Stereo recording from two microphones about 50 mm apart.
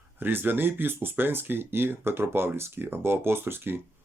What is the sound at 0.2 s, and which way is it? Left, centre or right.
Speech, right.